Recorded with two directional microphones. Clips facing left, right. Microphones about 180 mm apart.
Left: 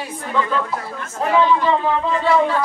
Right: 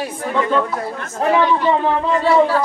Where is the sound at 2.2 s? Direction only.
35° right (ahead or behind).